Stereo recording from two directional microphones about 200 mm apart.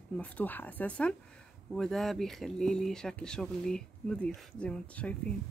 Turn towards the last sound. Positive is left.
turn(degrees=5)  # may be behind; listen again after turning